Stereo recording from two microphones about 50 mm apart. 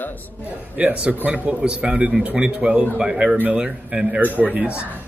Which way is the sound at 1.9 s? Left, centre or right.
Centre.